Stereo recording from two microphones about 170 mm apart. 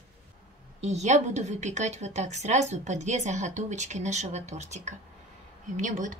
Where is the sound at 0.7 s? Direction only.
40° right (ahead or behind).